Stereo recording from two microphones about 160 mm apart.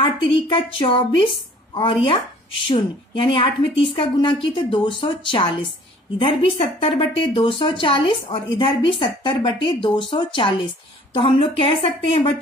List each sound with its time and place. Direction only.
0.0 s a woman's voice: 35° left (ahead or behind)